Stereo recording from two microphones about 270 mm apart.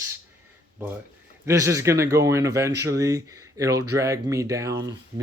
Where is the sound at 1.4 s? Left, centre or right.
Centre.